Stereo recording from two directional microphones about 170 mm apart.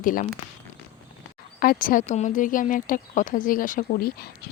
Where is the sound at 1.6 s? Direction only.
55° left (ahead or behind).